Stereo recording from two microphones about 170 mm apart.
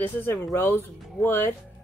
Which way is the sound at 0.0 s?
15° left (ahead or behind).